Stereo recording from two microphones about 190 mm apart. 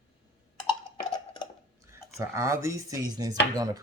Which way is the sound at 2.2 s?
15° right (ahead or behind).